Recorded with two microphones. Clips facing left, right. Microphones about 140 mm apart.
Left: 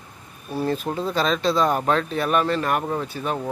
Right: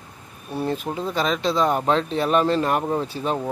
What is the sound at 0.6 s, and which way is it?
Speech, 15° right (ahead or behind).